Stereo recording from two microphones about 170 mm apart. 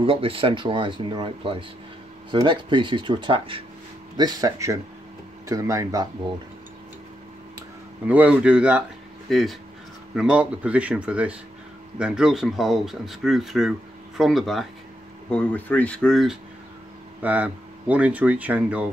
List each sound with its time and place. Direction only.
0.0 s speech: 30° right (ahead or behind)
8.1 s speech: 10° right (ahead or behind)